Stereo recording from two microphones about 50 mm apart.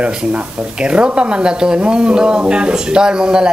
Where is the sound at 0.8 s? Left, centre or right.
Right.